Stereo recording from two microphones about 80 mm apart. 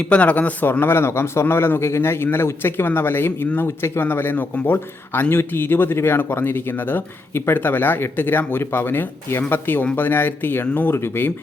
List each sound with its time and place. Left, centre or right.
0.0 s speech: centre